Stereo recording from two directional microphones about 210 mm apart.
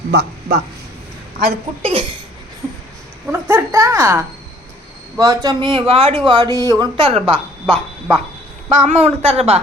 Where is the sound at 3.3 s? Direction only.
10° right (ahead or behind).